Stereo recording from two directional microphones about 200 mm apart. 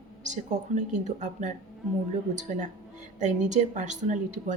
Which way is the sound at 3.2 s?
40° right (ahead or behind).